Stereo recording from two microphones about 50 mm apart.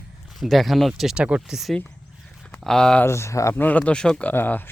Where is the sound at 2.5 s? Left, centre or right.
Centre.